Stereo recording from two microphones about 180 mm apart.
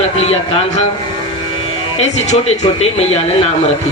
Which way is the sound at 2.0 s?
35° left (ahead or behind).